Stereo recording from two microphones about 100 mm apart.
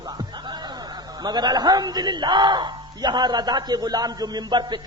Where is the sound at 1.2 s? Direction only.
45° right (ahead or behind).